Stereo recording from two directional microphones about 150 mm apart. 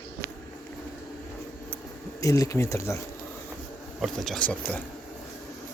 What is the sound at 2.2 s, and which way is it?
Speech, 20° left (ahead or behind).